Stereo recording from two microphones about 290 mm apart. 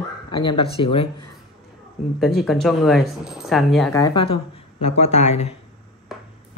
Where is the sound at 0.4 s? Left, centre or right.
Centre.